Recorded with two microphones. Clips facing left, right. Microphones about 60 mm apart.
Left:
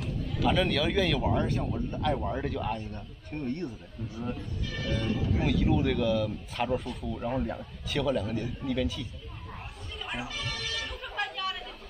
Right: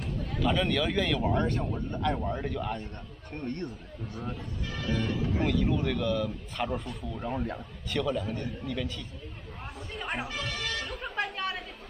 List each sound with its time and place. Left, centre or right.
0.4 s a man's voice: centre
5.4 s speech: centre
9.9 s chatter: right
10.9 s chatter: centre
11.1 s chatter: right